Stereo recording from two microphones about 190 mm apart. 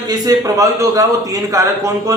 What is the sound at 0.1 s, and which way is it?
A man's voice, 20° right (ahead or behind).